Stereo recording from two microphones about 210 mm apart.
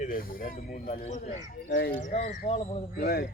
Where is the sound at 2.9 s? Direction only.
45° left (ahead or behind).